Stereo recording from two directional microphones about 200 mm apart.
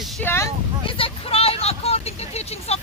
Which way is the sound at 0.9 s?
25° left (ahead or behind).